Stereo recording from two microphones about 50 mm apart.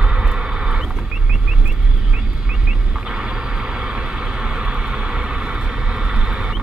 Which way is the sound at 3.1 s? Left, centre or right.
Centre.